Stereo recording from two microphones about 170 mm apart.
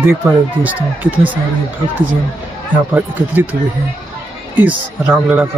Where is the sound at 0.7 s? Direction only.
10° right (ahead or behind).